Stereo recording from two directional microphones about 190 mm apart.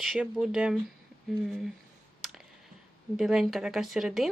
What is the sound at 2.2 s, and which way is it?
Clicking, centre (ahead or behind).